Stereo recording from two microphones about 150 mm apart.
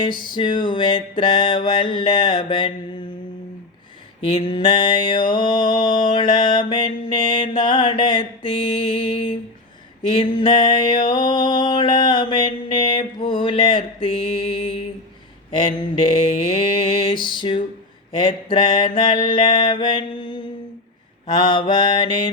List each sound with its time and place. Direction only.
0.0 s mantra: 30° left (ahead or behind)
4.2 s mantra: 35° left (ahead or behind)